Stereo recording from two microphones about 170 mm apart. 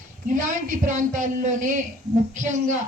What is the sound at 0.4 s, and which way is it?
Speech, 50° right (ahead or behind).